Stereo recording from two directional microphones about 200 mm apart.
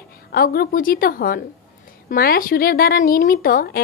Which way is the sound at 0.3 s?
50° left (ahead or behind).